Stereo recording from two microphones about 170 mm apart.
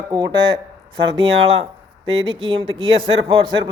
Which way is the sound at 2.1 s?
35° right (ahead or behind).